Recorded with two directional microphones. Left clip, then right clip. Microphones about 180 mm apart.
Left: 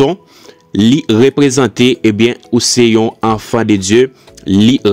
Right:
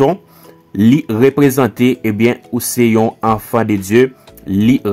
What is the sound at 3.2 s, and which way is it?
Speech, 35° left (ahead or behind).